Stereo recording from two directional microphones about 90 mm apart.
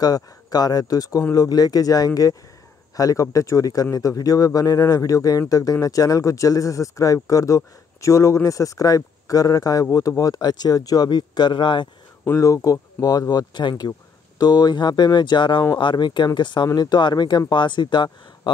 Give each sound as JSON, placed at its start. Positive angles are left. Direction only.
{"t": 0.0, "sound": "speech", "side_deg": 45}
{"t": 12.3, "sound": "speech", "side_deg": 40}